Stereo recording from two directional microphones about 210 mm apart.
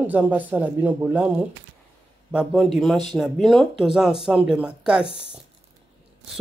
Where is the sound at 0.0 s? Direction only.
10° right (ahead or behind).